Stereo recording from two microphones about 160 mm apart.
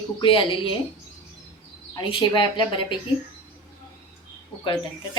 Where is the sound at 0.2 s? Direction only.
35° left (ahead or behind).